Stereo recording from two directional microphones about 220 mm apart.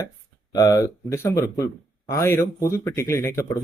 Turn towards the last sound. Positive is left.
turn(degrees=10)  # may be behind; listen again after turning